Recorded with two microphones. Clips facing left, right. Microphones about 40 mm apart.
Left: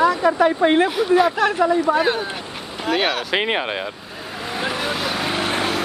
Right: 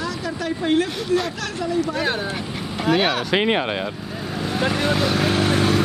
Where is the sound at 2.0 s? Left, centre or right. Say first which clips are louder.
Left 3 dB; centre.